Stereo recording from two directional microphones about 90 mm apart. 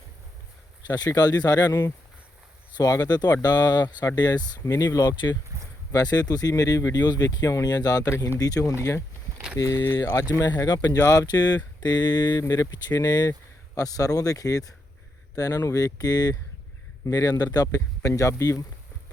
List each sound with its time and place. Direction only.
0.8 s speech: 50° left (ahead or behind)
2.7 s speech: 45° left (ahead or behind)
9.7 s speech: 25° left (ahead or behind)
10.3 s speech: 40° left (ahead or behind)